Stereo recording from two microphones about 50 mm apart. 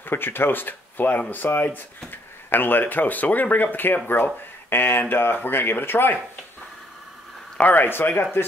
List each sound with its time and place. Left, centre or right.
0.0 s speech: left
7.5 s speech: left